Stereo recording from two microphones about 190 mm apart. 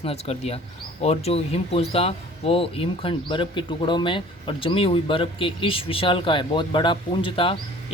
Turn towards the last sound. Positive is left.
turn(degrees=30)  # may be behind; listen again after turning